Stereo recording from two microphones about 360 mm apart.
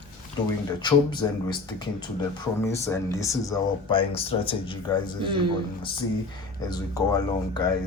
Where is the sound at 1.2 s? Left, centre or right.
Centre.